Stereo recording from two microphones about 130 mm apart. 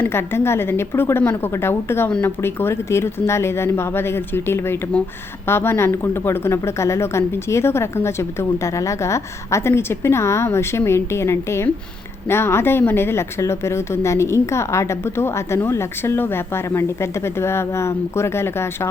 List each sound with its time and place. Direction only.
0.0 s a woman's voice: 20° left (ahead or behind)